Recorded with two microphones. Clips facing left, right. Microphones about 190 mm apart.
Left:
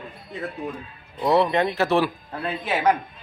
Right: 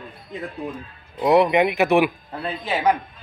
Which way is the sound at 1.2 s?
15° right (ahead or behind).